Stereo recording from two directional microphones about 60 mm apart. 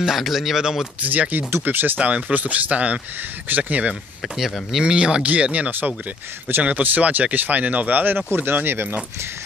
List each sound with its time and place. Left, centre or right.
0.0 s speech: centre
1.0 s speech: right
2.0 s speech: right
4.4 s speech: centre
4.9 s speech: centre; by 9.0 s right